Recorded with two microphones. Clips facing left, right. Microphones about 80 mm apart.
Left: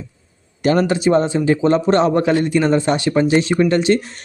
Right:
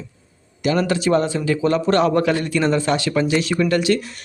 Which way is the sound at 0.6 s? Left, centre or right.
Left.